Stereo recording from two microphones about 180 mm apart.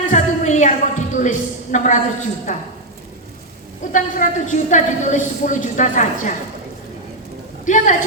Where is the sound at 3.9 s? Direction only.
45° left (ahead or behind).